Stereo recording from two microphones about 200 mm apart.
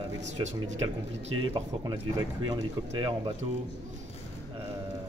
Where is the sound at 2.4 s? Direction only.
25° right (ahead or behind).